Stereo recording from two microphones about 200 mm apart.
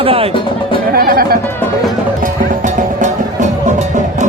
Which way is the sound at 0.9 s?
50° right (ahead or behind).